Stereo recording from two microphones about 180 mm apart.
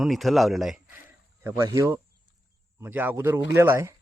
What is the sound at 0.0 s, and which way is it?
Speech, centre (ahead or behind).